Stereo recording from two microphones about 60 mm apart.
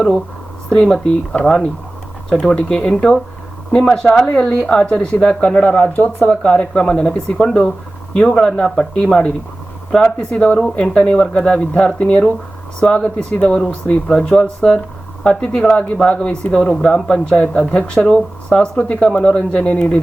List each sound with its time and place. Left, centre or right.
0.7 s speech: centre; by 13.6 s left
14.1 s speech: centre